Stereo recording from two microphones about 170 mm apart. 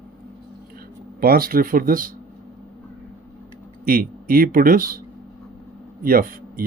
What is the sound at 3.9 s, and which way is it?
Speech, 60° right (ahead or behind).